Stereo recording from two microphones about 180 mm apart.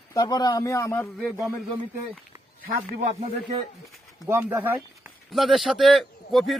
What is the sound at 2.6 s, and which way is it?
Speech, 45° right (ahead or behind).